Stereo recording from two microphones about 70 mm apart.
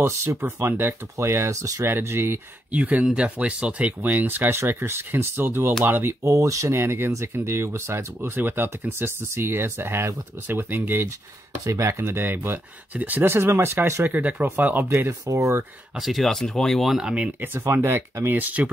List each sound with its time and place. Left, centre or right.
0.0 s speech: right
1.9 s speech: right
2.7 s speech: centre
6.2 s speech: right
11.6 s speech: right
13.3 s speech: right
14.1 s speech: right
16.0 s speech: centre
17.8 s speech: right
18.3 s speech: right